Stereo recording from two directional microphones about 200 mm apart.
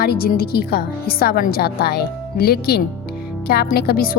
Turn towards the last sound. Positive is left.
turn(degrees=50)  # may be behind; listen again after turning